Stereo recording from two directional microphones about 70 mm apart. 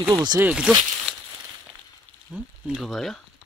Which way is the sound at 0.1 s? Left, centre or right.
Right.